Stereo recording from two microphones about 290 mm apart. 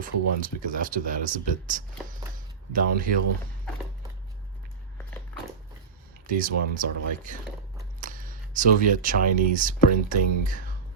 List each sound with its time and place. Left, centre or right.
0.0 s speech: right
6.3 s speech: right
8.0 s a sound: right
9.6 s speech: right